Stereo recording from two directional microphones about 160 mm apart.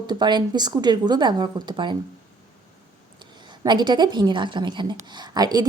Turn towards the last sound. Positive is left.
turn(degrees=-25)  # may be behind; listen again after turning